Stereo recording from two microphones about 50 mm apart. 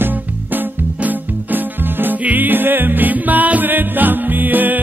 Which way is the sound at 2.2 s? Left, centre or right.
Right.